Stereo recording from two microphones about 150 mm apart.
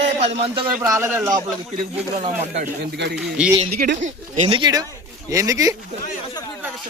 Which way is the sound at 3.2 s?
5° right (ahead or behind).